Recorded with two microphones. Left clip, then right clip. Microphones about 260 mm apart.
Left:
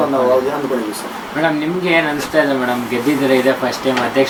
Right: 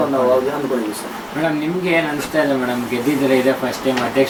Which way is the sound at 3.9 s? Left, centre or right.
Centre.